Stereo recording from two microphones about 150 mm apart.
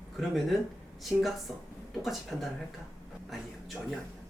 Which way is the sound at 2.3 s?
Centre (ahead or behind).